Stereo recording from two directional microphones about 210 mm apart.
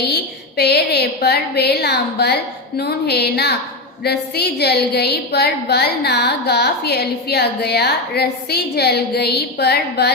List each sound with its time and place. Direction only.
0.0 s a woman's voice: 50° left (ahead or behind)